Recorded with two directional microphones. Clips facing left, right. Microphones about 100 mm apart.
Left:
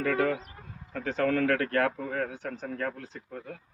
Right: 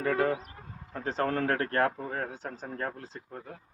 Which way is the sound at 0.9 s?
35° right (ahead or behind).